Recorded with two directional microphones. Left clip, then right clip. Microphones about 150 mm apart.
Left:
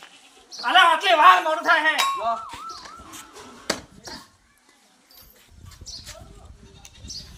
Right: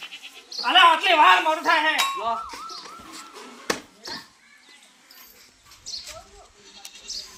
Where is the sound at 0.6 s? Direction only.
15° left (ahead or behind).